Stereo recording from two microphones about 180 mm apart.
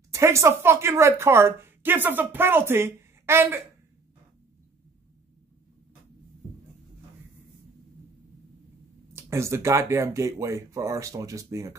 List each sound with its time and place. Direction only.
0.1 s a woman's voice: 15° right (ahead or behind)
9.1 s a woman's voice: 15° right (ahead or behind)